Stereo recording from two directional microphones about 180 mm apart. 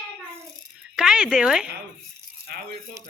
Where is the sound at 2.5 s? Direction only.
60° right (ahead or behind).